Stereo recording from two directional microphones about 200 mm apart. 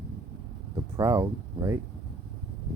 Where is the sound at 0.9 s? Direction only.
15° right (ahead or behind).